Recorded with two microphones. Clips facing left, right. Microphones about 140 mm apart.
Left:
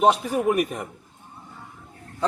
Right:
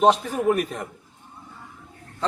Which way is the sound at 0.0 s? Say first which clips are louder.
Right 1 dB; 5° left (ahead or behind).